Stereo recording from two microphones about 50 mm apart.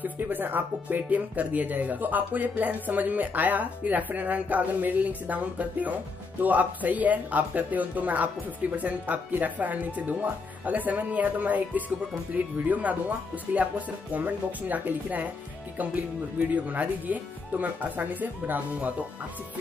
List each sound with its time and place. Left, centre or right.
0.0 s speech: right